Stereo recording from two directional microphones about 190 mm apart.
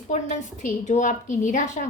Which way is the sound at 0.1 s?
40° left (ahead or behind).